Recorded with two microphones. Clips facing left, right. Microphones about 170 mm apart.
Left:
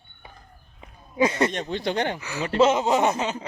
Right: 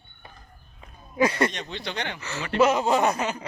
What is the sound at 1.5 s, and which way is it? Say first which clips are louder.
Speech: left 7 dB; 45° left (ahead or behind).